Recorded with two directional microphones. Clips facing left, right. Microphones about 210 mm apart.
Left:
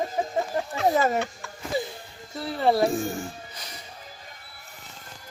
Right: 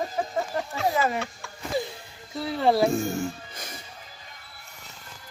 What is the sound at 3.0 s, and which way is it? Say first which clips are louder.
Speech: right 3 dB; 15° left (ahead or behind).